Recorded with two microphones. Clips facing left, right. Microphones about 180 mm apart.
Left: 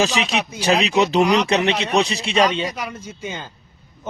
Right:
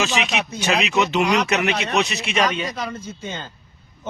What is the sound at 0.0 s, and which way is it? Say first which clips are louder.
Speech: left 3 dB; 35° left (ahead or behind).